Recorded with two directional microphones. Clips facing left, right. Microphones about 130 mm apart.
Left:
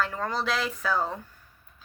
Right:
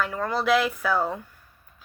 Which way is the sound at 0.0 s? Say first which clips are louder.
Right 3 dB; 15° right (ahead or behind).